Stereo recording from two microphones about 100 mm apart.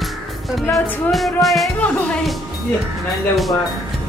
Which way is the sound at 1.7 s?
15° left (ahead or behind).